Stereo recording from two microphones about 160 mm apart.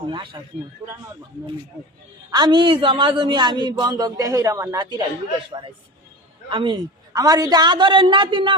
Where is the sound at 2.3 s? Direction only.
30° right (ahead or behind).